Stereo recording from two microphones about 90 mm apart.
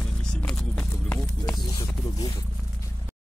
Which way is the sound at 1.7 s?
55° left (ahead or behind).